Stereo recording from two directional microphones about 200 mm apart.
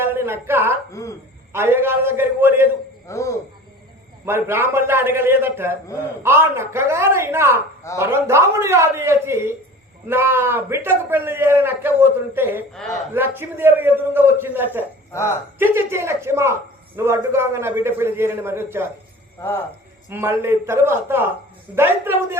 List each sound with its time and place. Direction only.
0.0 s a sound: 10° right (ahead or behind)
1.5 s a man's voice: 10° right (ahead or behind)
3.1 s speech: 15° left (ahead or behind)
4.3 s a man's voice: 10° right (ahead or behind)
12.7 s a woman's voice: centre (ahead or behind)
13.1 s a man's voice: 10° right (ahead or behind)
15.1 s a woman's voice: 15° left (ahead or behind)
15.5 s a man's voice: 10° right (ahead or behind)
19.4 s speech: 10° left (ahead or behind)
20.1 s a man's voice: 10° right (ahead or behind)